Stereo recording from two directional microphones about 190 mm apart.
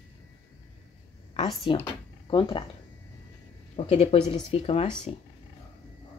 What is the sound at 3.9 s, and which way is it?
A woman's voice, 35° left (ahead or behind).